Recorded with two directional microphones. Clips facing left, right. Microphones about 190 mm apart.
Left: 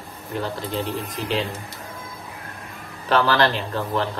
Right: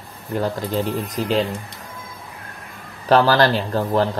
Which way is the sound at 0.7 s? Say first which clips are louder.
Right 4 dB; 40° right (ahead or behind).